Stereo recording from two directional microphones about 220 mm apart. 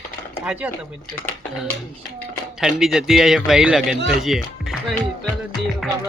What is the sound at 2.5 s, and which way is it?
Speech, centre (ahead or behind).